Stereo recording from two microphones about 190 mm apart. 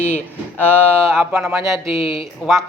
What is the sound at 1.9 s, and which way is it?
Speech, 30° left (ahead or behind).